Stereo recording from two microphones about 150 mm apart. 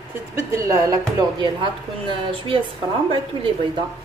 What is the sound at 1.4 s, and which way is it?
Speech, 35° right (ahead or behind).